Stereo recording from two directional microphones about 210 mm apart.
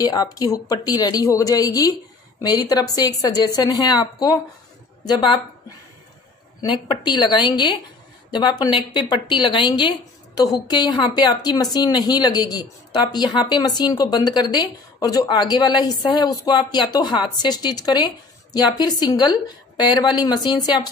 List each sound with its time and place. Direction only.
0.0 s a woman's voice: 15° left (ahead or behind)
6.6 s speech: 20° left (ahead or behind)